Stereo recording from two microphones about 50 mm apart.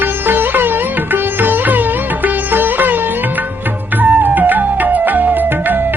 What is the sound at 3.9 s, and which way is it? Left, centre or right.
Music, right.